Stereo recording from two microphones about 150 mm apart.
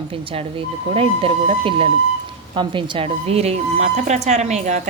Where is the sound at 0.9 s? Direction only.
40° right (ahead or behind).